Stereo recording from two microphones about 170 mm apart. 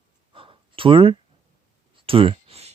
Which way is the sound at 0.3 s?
30° right (ahead or behind).